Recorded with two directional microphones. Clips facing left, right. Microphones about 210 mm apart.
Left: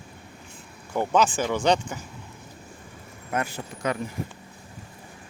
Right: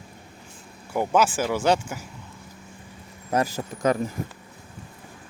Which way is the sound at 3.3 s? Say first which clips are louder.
Right 5 dB; 40° right (ahead or behind).